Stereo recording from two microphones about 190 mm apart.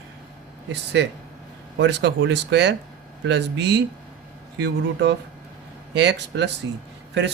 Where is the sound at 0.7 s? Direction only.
65° right (ahead or behind).